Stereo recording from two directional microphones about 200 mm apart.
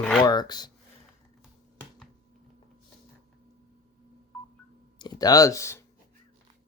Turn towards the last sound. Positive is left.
turn(degrees=15)  # may be behind; listen again after turning